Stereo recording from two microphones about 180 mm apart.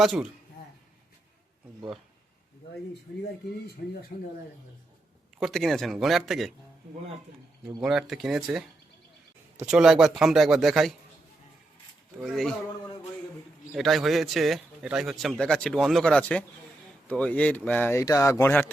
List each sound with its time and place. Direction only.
0.0 s speech: centre (ahead or behind)
4.1 s speech: 40° left (ahead or behind)
5.4 s speech: centre (ahead or behind)
7.8 s speech: centre (ahead or behind)
12.2 s speech: centre (ahead or behind)
13.7 s speech: centre (ahead or behind)